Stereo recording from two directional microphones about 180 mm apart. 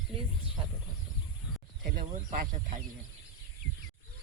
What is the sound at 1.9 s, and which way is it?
Speech, 50° right (ahead or behind).